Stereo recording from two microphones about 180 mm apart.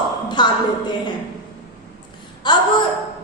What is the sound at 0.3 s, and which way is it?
Speech, 25° left (ahead or behind).